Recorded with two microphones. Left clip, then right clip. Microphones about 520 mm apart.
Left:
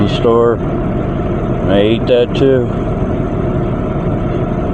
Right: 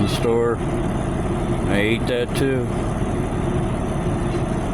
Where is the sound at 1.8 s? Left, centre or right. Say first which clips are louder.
Left 11 dB; right.